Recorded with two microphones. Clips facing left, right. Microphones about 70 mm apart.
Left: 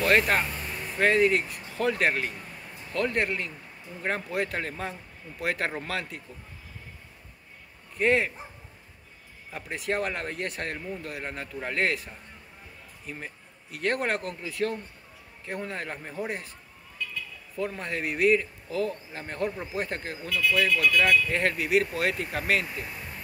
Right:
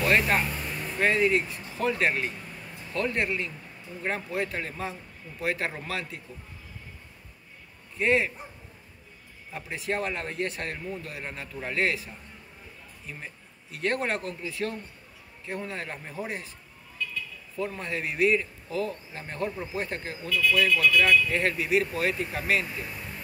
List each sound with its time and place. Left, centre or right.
0.0 s speech: left
0.4 s vehicle: centre
1.0 s speech: left
8.0 s speech: left
9.5 s a man's voice: left
17.7 s speech: left
22.8 s speech: centre